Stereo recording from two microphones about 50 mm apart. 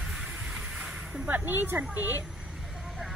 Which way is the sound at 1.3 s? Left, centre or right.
Right.